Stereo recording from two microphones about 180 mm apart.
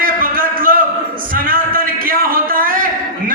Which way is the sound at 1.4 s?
50° right (ahead or behind).